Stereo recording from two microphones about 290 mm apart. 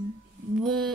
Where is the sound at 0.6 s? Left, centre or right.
Centre.